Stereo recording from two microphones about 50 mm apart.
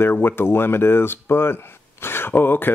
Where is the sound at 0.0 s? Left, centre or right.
Left.